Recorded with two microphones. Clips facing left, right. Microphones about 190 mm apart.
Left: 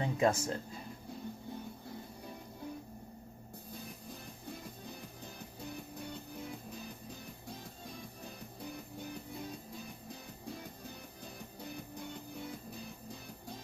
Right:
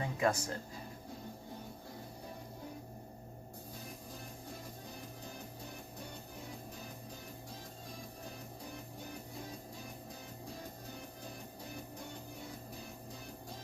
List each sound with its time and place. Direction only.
0.0 s speech: 25° left (ahead or behind)